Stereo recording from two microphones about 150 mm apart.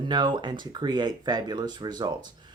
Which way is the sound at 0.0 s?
30° right (ahead or behind).